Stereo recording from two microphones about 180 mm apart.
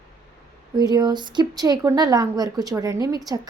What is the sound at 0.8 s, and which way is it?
A woman's voice, 20° right (ahead or behind).